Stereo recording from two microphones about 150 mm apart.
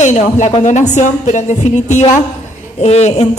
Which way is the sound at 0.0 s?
55° left (ahead or behind).